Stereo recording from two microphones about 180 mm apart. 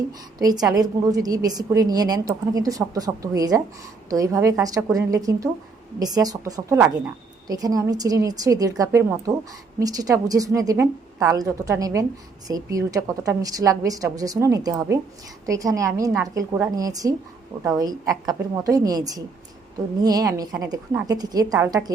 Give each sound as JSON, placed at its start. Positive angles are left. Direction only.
{"t": 0.3, "sound": "a woman's voice", "side_deg": -20}